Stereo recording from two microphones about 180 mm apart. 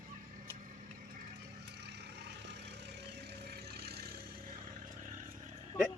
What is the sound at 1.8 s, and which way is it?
Vehicle, 70° right (ahead or behind).